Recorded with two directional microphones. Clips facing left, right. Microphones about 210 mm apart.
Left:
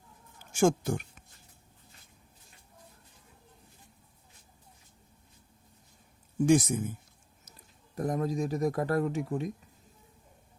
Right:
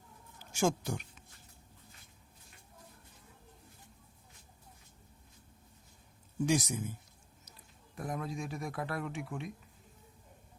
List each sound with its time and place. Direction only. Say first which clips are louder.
0.5 s speech: left 6 dB; 50° left (ahead or behind)
6.4 s speech: left 7 dB; 50° left (ahead or behind)
7.9 s speech: left 8 dB; 40° left (ahead or behind)